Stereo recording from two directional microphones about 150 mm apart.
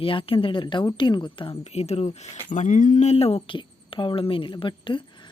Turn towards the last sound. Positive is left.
turn(degrees=35)  # may be behind; listen again after turning